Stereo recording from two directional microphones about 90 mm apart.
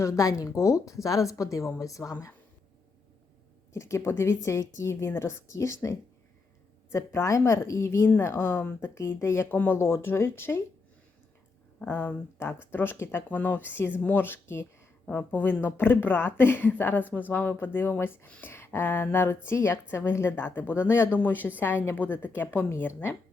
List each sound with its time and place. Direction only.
0.0 s a woman's voice: 40° left (ahead or behind)
3.7 s a woman's voice: 35° left (ahead or behind)
11.8 s speech: 20° left (ahead or behind)